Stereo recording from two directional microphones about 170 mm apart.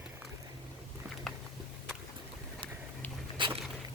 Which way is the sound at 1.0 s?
10° right (ahead or behind).